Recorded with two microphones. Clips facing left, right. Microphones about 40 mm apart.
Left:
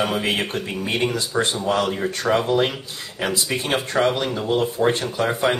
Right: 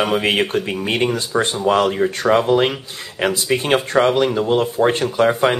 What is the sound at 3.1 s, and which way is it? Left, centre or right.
Speech, right.